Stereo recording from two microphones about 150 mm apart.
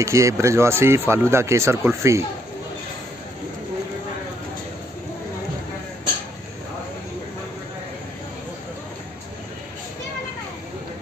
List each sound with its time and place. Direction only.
0.0 s speech: 20° right (ahead or behind)